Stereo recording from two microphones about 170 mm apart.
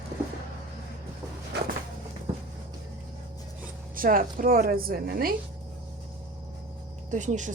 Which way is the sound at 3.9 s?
55° right (ahead or behind).